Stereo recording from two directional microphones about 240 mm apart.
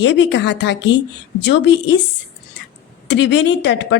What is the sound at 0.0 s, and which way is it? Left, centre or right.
A woman's voice, left.